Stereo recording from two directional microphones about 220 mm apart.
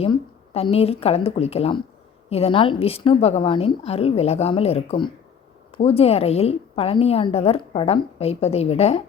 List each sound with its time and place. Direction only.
0.0 s a woman's voice: 25° left (ahead or behind)